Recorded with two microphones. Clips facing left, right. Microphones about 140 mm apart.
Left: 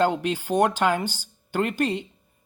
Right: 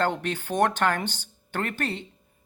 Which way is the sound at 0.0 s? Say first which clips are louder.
Left 4 dB; 10° left (ahead or behind).